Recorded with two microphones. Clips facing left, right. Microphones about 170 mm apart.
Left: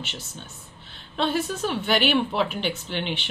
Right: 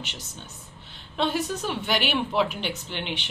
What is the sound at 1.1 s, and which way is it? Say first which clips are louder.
A woman's voice: left 1 dB; 15° right (ahead or behind).